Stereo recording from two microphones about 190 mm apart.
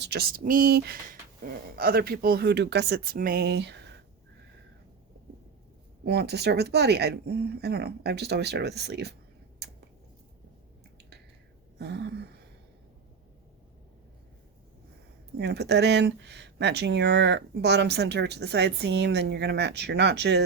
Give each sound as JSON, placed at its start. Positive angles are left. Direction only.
{"t": 0.0, "sound": "speech", "side_deg": -55}
{"t": 6.1, "sound": "speech", "side_deg": -60}
{"t": 11.8, "sound": "a sound", "side_deg": -60}
{"t": 15.4, "sound": "speech", "side_deg": -60}